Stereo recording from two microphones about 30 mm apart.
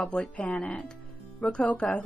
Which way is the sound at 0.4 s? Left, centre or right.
Left.